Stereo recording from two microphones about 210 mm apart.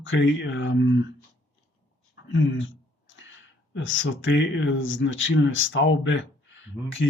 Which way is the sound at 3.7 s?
65° left (ahead or behind).